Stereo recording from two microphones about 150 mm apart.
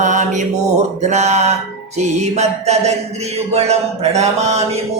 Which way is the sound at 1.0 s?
50° right (ahead or behind).